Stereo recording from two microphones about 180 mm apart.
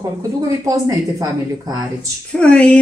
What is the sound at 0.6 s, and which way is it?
Speech, 20° right (ahead or behind).